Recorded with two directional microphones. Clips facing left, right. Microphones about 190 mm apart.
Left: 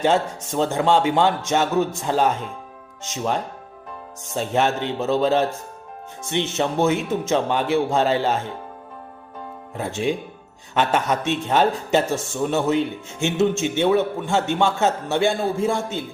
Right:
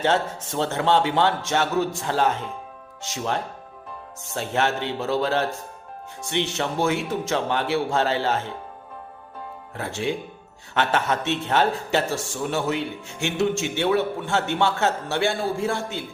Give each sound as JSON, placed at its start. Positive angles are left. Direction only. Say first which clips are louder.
{"t": 0.0, "sound": "a man's voice", "louder": "left 3 dB", "side_deg": 15}
{"t": 9.7, "sound": "a man's voice", "louder": "left 3 dB", "side_deg": 20}